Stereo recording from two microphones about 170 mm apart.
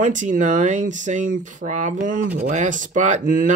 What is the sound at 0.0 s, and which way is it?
Speech, 50° right (ahead or behind).